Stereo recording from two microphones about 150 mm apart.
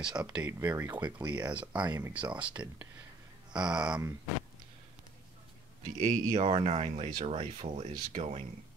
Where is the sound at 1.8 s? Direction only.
20° right (ahead or behind).